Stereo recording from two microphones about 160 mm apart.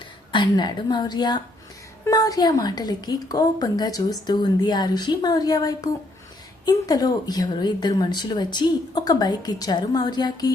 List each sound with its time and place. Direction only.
0.3 s a woman's voice: 30° left (ahead or behind)